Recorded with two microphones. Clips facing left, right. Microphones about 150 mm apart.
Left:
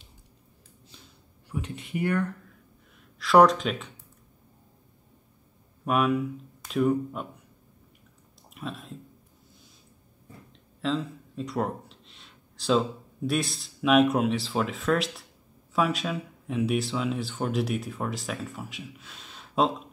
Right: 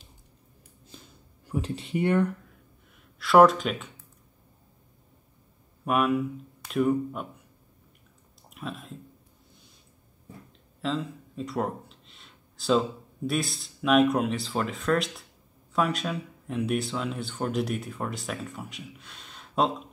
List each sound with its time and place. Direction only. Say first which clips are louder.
0.9 s a sound: right 5 dB; 45° right (ahead or behind)
1.5 s speech: right 4 dB; 30° right (ahead or behind)
3.2 s speech: right 1 dB; 5° right (ahead or behind)
5.9 s speech: even; centre (ahead or behind)
8.5 s speech: even; centre (ahead or behind)
10.8 s a sound: left 1 dB; centre (ahead or behind)
13.3 s speech: left 1 dB; centre (ahead or behind)